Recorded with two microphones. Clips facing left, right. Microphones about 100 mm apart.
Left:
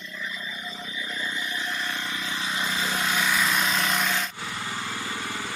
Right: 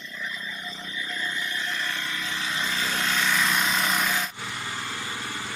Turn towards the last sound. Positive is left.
turn(degrees=0)  # may be behind; listen again after turning